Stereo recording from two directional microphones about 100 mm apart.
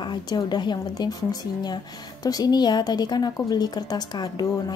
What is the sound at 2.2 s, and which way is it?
A woman's voice, 40° left (ahead or behind).